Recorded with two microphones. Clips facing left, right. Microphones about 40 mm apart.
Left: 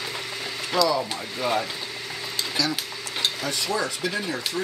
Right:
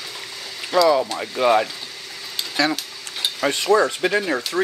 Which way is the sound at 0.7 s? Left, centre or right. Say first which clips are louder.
Right 5 dB; centre.